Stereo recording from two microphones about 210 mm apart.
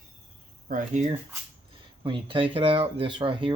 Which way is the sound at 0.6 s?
35° right (ahead or behind).